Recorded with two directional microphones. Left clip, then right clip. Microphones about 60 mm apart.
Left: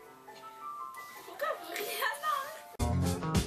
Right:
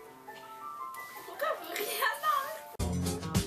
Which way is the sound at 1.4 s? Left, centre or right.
Centre.